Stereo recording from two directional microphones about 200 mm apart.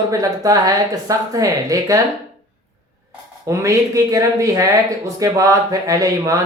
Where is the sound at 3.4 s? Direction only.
15° right (ahead or behind).